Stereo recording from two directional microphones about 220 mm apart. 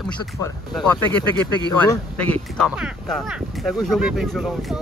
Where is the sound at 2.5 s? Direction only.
Centre (ahead or behind).